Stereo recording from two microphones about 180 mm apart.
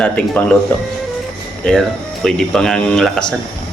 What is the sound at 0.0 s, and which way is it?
Speech, 5° left (ahead or behind).